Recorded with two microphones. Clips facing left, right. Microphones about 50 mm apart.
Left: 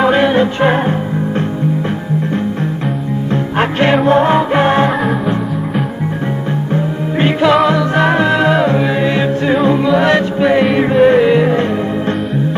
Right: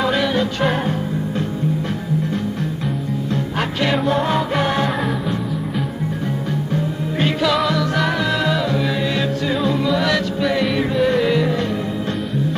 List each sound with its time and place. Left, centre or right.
0.0 s music: left
3.5 s music: left
6.7 s music: left